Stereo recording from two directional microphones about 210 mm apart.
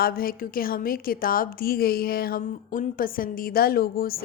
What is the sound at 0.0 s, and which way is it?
A woman's voice, 45° left (ahead or behind).